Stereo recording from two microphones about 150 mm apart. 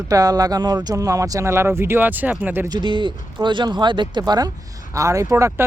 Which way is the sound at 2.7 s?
30° right (ahead or behind).